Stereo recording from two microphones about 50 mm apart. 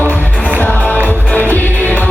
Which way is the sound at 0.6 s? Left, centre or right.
Left.